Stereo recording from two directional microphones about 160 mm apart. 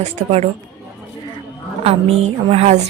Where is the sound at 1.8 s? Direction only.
40° right (ahead or behind).